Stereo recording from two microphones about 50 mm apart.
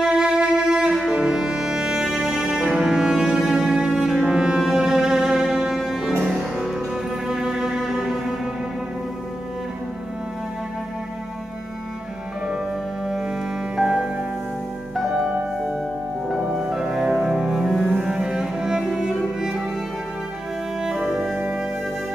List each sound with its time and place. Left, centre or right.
0.0 s music: centre
4.6 s cello: centre
6.2 s music: centre
13.0 s music: centre
17.9 s cello: centre
20.8 s music: centre